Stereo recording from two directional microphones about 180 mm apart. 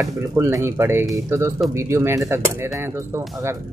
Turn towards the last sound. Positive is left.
turn(degrees=-15)  # may be behind; listen again after turning